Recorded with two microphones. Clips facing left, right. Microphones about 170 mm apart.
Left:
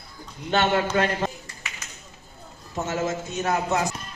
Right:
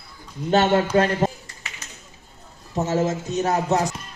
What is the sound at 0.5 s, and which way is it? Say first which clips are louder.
Speech: right 4 dB; 40° right (ahead or behind).